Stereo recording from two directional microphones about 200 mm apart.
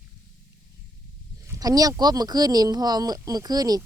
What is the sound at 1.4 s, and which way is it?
Speech, 20° right (ahead or behind).